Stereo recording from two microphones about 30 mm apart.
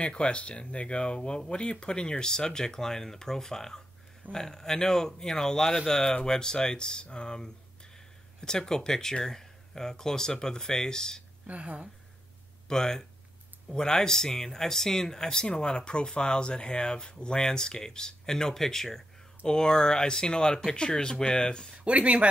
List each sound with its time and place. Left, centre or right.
0.0 s speech: left
11.6 s speech: right
12.6 s speech: left
19.4 s speech: left
21.8 s speech: right